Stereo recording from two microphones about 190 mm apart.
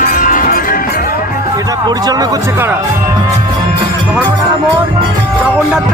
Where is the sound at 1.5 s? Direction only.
20° right (ahead or behind).